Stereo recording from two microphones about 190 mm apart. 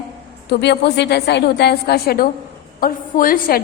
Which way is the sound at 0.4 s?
65° left (ahead or behind).